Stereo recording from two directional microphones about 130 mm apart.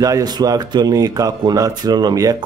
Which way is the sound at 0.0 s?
30° right (ahead or behind).